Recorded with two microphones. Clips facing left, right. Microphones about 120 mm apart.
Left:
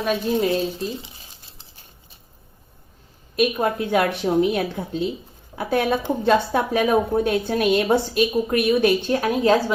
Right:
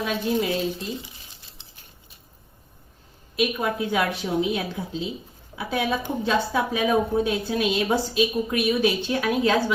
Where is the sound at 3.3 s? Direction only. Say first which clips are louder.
Left 4 dB; 50° left (ahead or behind).